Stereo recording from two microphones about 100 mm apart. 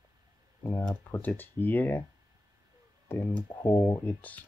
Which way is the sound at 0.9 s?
25° left (ahead or behind).